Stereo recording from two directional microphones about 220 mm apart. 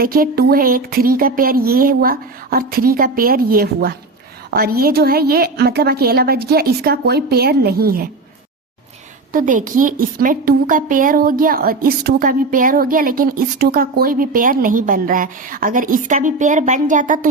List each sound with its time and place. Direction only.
0.0 s a woman's voice: 40° right (ahead or behind)
9.3 s a woman's voice: 35° right (ahead or behind)